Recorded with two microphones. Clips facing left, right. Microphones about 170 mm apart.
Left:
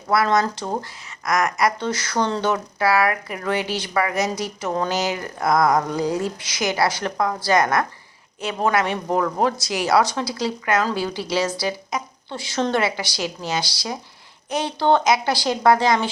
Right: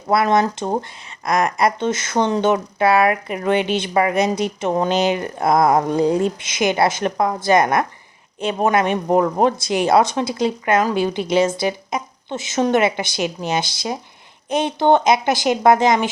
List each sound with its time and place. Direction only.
0.1 s speech: 25° right (ahead or behind)